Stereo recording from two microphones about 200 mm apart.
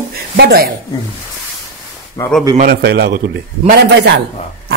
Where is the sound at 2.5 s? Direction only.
50° right (ahead or behind).